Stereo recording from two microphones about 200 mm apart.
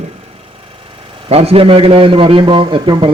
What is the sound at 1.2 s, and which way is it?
A man's voice, 30° right (ahead or behind).